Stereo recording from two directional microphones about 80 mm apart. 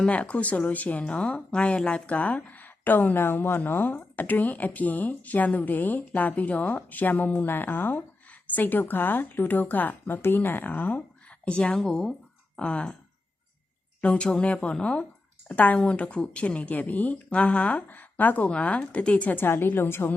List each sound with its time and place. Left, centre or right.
0.0 s speech: centre
14.0 s speech: centre; by 20.1 s left